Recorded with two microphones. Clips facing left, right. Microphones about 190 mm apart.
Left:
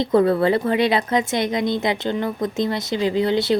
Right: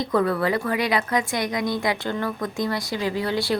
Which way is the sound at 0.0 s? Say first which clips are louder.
Left 5 dB; 25° left (ahead or behind).